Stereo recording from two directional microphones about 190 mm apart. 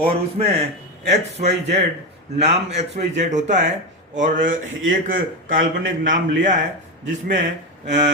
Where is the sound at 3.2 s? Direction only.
40° right (ahead or behind).